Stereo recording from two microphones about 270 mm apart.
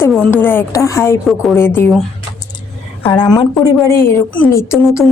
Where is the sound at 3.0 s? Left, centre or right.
Centre.